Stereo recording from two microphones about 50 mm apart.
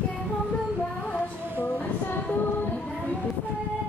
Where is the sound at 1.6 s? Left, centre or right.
Left.